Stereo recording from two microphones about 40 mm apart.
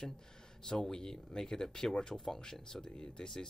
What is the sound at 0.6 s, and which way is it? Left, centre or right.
Speech, centre.